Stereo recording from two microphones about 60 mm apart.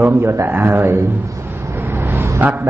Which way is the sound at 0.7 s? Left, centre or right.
Right.